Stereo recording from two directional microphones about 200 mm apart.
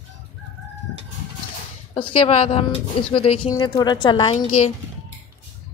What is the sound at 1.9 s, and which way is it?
Speech, 30° left (ahead or behind).